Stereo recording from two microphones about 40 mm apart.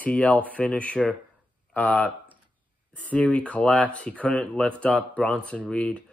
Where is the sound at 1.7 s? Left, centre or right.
Left.